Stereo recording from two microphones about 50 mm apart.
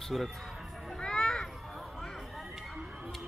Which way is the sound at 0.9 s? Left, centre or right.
Centre.